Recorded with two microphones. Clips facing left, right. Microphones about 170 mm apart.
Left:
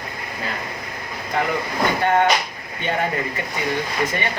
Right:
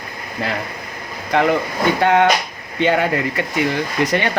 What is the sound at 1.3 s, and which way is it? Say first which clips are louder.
Speech: right 6 dB; 90° right.